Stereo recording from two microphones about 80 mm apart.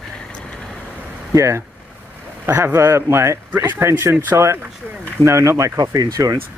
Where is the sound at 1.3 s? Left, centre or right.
Right.